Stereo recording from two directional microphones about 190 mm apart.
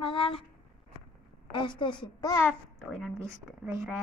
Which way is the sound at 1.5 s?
25° left (ahead or behind).